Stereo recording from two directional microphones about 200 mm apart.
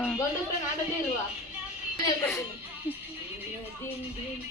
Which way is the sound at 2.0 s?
15° left (ahead or behind).